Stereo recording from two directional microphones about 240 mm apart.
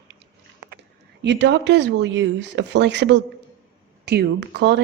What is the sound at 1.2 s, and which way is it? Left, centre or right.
Speech, right.